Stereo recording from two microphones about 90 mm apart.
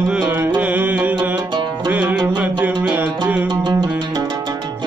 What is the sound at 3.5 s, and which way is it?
Music, 60° right (ahead or behind).